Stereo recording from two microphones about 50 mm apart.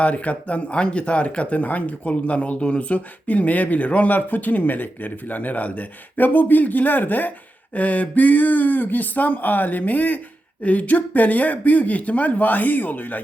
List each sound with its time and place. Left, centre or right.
0.0 s speech: left